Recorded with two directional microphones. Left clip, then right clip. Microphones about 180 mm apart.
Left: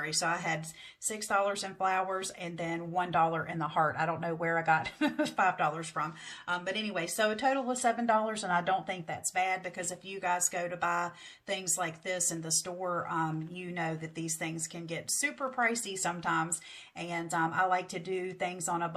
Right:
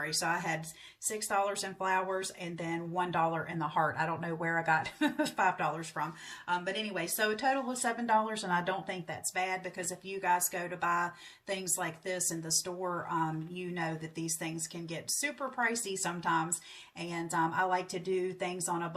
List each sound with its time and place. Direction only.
0.0 s speech: 30° left (ahead or behind)